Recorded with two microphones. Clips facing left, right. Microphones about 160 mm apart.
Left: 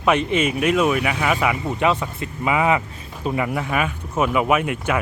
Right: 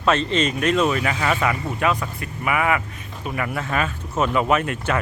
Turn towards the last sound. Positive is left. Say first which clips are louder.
# left 1 dB
turn(degrees=10)  # may be behind; listen again after turning